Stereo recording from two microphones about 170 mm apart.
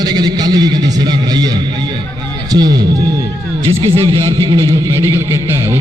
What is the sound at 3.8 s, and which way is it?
Speech, 35° right (ahead or behind).